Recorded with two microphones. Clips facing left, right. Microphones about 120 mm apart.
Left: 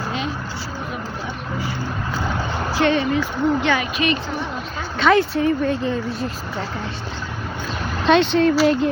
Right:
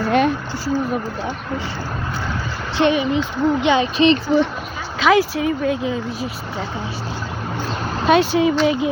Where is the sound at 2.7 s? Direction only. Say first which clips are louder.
Right 2 dB; 15° right (ahead or behind).